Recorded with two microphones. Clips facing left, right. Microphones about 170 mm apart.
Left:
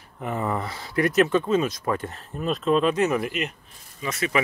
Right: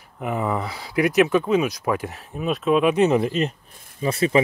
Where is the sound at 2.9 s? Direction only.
20° right (ahead or behind).